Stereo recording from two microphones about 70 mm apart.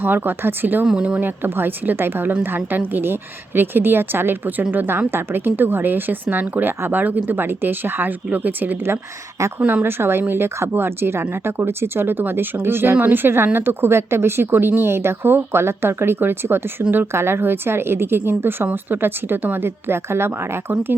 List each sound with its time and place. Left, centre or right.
0.0 s a woman's voice: right
0.9 s speech: centre
1.2 s a woman's voice: right
9.8 s speech: right